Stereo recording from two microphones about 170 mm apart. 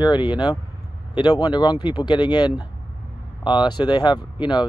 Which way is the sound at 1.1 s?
25° left (ahead or behind).